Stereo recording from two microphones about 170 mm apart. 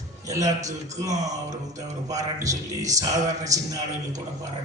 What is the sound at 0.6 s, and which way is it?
Music, 20° right (ahead or behind).